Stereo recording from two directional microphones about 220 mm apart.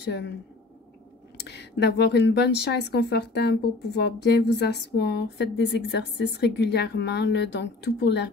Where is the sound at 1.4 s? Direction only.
50° left (ahead or behind).